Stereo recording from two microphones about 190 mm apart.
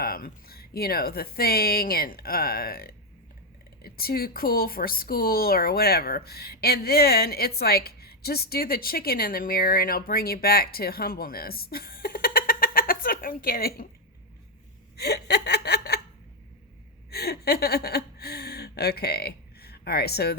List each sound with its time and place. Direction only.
0.0 s speech: 50° left (ahead or behind)
14.9 s speech: 60° left (ahead or behind)
17.1 s a woman's voice: 55° left (ahead or behind)